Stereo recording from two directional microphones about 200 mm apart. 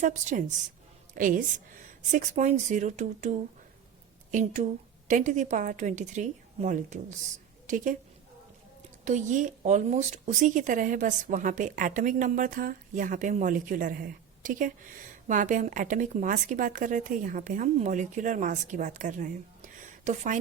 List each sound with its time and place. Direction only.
0.0 s a woman's voice: 40° right (ahead or behind)
9.0 s speech: 35° right (ahead or behind)